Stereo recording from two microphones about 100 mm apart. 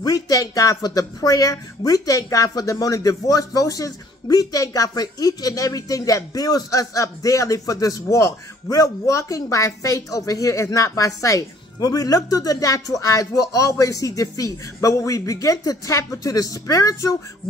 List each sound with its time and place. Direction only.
0.0 s speech: 40° left (ahead or behind)